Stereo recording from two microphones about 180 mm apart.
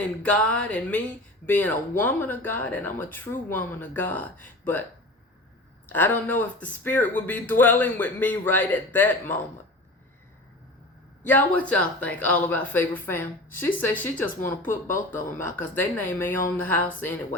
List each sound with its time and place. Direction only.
0.0 s speech: 5° left (ahead or behind)
5.9 s speech: 10° left (ahead or behind)
11.3 s speech: 10° left (ahead or behind)